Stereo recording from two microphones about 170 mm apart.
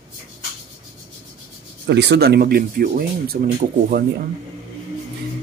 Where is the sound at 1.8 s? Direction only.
90° right; by 4.1 s 65° right (ahead or behind).